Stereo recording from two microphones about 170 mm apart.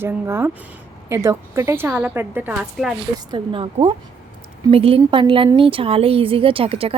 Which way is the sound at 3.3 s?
30° right (ahead or behind).